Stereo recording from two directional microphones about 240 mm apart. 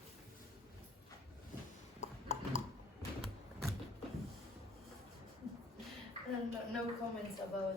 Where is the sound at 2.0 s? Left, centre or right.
Left.